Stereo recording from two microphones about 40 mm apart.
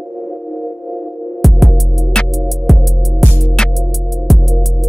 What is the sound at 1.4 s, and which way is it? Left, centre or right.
Music, centre.